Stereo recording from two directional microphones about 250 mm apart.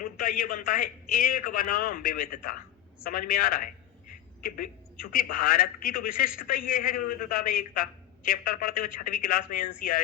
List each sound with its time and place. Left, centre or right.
0.0 s a man's voice: left
5.1 s a man's voice: left